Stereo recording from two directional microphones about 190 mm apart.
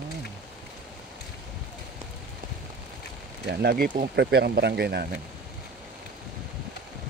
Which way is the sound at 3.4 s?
60° right (ahead or behind).